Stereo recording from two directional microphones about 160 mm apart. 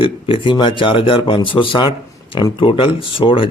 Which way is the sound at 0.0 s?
30° left (ahead or behind).